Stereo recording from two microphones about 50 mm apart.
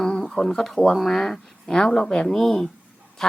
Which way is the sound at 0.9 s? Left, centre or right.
Centre.